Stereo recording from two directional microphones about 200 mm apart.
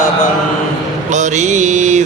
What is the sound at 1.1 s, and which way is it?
Mantra, 35° right (ahead or behind).